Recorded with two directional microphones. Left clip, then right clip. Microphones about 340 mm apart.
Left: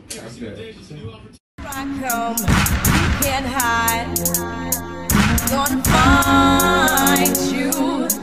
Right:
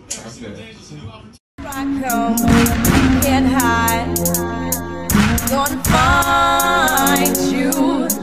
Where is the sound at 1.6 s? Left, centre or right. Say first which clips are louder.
Right 4 dB; centre.